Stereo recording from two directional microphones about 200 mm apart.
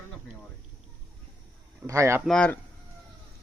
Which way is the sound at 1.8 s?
15° right (ahead or behind).